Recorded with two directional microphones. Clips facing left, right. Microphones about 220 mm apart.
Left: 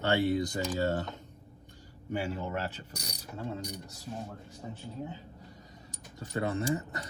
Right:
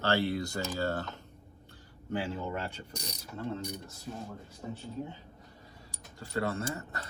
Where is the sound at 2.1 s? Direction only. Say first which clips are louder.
Left 1 dB; 10° left (ahead or behind).